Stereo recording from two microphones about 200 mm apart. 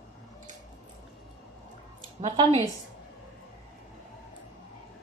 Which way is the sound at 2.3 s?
20° right (ahead or behind).